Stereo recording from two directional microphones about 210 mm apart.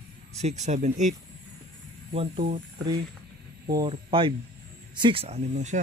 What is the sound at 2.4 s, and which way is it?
Speech, 50° right (ahead or behind).